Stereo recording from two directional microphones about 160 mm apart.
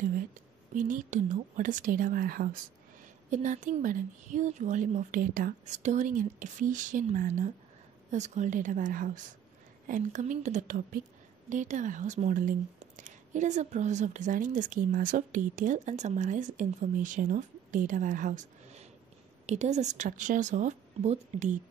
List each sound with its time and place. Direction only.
0.7 s a woman's voice: 55° right (ahead or behind)
3.3 s a woman's voice: 50° right (ahead or behind)